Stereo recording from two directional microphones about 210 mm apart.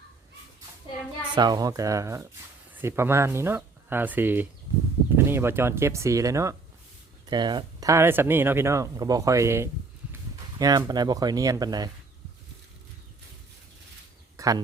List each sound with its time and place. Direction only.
1.4 s speech: 20° right (ahead or behind)
14.3 s speech: 15° right (ahead or behind)